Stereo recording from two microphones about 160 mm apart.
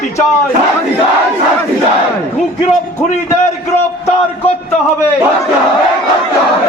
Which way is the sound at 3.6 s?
40° left (ahead or behind).